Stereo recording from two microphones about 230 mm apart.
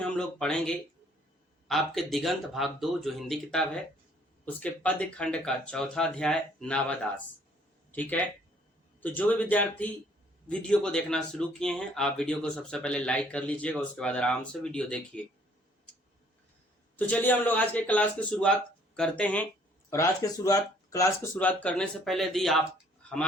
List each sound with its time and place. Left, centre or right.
0.0 s speech: centre
17.1 s speech: centre